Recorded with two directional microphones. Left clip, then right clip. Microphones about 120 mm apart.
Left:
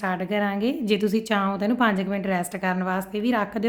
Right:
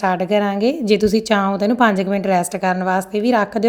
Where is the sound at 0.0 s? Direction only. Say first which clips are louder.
Right 8 dB; 45° right (ahead or behind).